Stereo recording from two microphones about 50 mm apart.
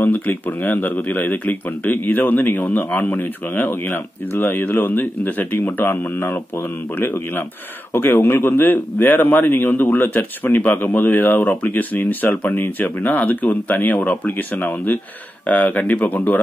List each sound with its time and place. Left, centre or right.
0.0 s a man's voice: left